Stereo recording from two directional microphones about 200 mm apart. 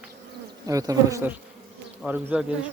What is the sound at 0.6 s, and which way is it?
Bee, 15° right (ahead or behind).